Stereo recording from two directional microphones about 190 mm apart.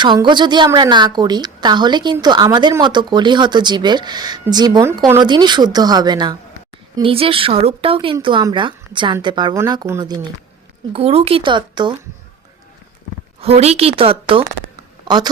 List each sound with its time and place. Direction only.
0.0 s speech: 25° right (ahead or behind)
10.9 s speech: 30° right (ahead or behind)
13.4 s a woman's voice: 35° right (ahead or behind)